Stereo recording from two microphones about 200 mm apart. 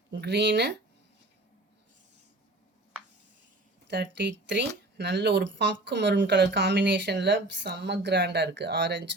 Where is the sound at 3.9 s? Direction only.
60° right (ahead or behind).